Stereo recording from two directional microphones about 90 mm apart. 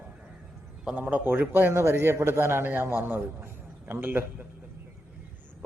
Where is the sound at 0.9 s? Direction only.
20° right (ahead or behind).